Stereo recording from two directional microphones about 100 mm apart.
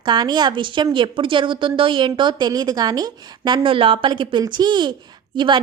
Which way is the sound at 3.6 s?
60° right (ahead or behind).